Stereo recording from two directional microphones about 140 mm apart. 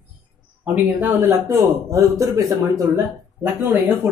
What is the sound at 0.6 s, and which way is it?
A man's voice, 15° right (ahead or behind).